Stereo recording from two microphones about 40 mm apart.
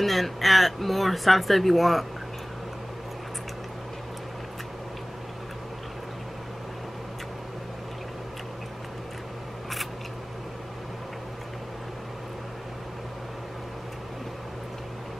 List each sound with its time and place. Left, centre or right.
0.0 s speech: centre